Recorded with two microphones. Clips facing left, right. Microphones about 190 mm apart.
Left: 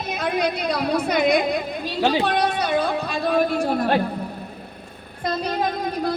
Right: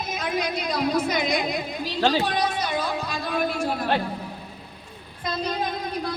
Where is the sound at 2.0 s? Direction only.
15° left (ahead or behind).